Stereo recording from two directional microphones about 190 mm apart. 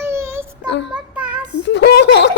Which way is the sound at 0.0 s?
15° right (ahead or behind).